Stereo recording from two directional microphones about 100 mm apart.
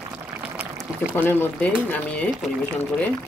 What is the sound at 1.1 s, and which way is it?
Speech, 20° left (ahead or behind).